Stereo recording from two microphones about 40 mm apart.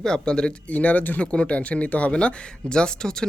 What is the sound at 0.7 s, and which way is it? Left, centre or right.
Speech, left.